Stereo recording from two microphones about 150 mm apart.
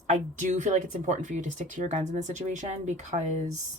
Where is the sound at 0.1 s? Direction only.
55° right (ahead or behind).